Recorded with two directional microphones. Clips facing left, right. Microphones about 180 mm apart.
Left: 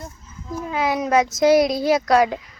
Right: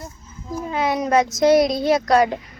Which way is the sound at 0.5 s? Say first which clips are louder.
Even; centre (ahead or behind).